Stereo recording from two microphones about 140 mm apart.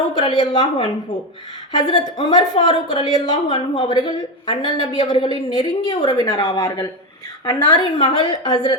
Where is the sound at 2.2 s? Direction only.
40° left (ahead or behind).